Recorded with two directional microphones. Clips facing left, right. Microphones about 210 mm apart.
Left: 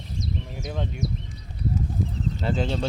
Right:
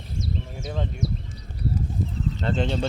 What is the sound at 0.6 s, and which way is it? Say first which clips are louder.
Speech: even; centre (ahead or behind).